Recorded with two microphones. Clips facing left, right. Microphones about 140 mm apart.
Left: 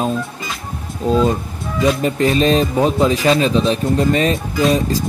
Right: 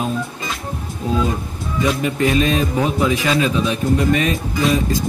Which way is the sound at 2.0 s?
35° left (ahead or behind).